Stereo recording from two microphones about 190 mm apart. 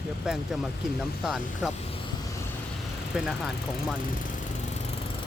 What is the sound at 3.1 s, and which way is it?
Speech, 5° right (ahead or behind).